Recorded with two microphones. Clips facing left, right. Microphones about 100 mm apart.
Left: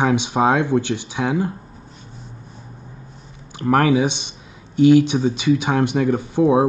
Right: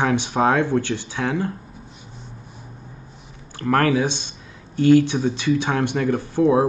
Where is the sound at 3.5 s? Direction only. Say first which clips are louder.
Left 2 dB; 15° left (ahead or behind).